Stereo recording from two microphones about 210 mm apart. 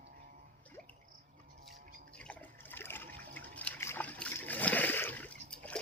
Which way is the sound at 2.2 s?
5° left (ahead or behind).